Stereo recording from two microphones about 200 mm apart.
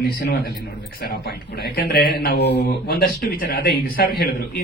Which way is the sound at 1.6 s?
50° left (ahead or behind).